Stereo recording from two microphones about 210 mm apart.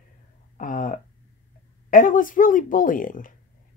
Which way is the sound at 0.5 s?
40° left (ahead or behind).